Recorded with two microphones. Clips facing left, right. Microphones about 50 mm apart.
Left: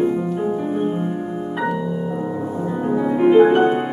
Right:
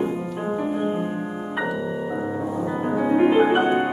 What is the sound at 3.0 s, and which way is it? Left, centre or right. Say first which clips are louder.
Music: left 5 dB; centre.